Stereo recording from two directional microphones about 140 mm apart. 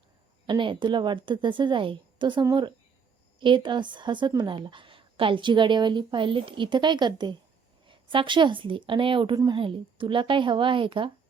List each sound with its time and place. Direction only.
0.4 s a woman's voice: 35° right (ahead or behind)